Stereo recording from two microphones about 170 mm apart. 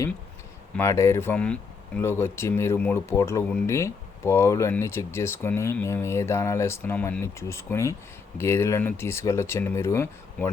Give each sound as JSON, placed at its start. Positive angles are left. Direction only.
{"t": 0.8, "sound": "speech", "side_deg": 15}